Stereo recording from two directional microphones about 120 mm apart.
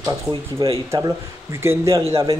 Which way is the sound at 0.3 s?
45° right (ahead or behind).